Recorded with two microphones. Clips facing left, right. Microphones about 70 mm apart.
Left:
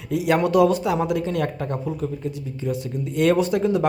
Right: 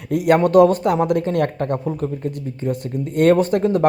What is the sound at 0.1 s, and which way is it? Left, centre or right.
Speech, right.